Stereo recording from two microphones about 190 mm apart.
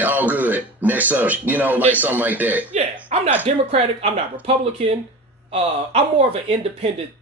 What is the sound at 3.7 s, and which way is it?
Speech, 30° right (ahead or behind).